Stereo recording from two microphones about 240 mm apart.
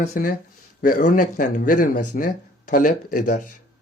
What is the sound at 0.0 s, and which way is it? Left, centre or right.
Speech, left.